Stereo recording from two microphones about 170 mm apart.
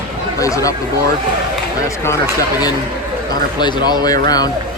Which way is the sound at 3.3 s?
25° left (ahead or behind).